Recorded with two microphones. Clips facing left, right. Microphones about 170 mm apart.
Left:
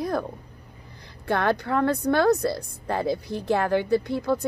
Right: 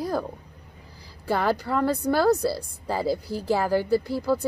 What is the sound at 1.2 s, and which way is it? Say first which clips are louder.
Speech: left 1 dB; 10° right (ahead or behind).